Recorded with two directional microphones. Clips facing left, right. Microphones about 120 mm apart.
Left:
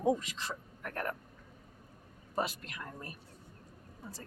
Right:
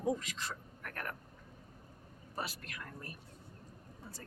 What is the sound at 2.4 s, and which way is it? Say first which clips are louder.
Speech: left 7 dB; 20° left (ahead or behind).